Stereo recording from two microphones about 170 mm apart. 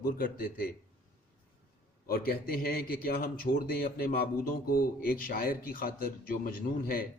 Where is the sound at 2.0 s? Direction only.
60° left (ahead or behind).